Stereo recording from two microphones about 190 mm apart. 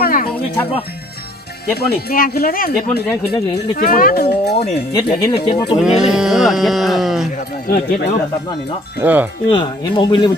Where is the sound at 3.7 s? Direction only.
50° left (ahead or behind).